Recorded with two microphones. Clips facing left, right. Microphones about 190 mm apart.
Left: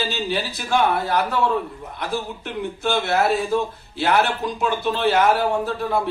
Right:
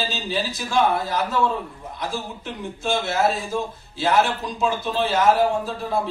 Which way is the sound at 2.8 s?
60° left (ahead or behind).